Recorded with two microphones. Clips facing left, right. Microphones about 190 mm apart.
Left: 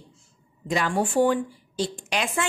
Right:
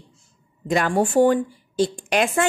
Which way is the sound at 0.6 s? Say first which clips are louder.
Right 4 dB; 50° right (ahead or behind).